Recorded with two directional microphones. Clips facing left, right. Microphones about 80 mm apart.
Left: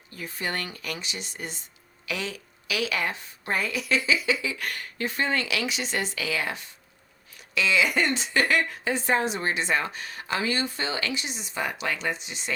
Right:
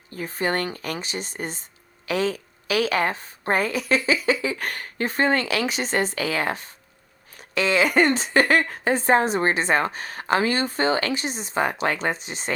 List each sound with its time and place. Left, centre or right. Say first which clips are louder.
0.1 s a woman's voice: right 7 dB; right